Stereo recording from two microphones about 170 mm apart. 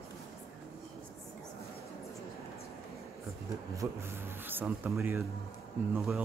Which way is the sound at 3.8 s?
15° right (ahead or behind).